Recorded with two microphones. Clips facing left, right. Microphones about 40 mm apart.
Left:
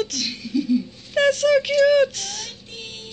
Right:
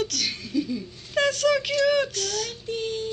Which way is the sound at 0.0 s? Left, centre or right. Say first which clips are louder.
Left 2 dB; left.